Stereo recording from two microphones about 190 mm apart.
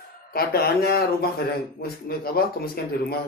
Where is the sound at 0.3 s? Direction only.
50° left (ahead or behind).